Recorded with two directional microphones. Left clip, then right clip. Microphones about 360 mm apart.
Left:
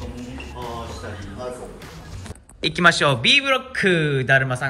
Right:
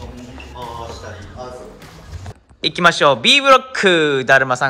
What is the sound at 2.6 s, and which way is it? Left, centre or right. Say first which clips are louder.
A man's voice: right 4 dB; centre.